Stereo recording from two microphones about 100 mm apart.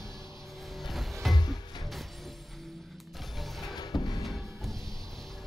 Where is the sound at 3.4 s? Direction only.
Centre (ahead or behind).